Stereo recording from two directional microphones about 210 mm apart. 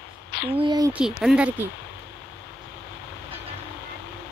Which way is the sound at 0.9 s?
5° right (ahead or behind).